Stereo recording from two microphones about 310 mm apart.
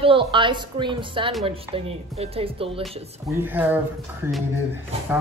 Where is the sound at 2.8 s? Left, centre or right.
Centre.